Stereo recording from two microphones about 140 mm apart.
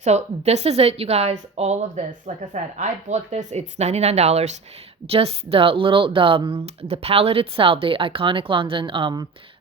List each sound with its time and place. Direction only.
0.0 s speech: 50° right (ahead or behind); by 9.2 s 35° right (ahead or behind)